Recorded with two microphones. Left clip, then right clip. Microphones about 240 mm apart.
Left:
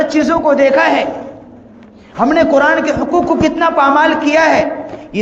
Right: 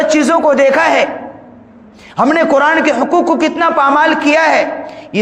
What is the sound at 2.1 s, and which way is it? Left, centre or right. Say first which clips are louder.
A man's voice: even; right.